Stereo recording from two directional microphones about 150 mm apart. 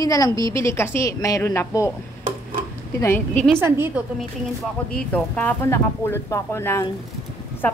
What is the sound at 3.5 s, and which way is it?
Speech, 15° right (ahead or behind).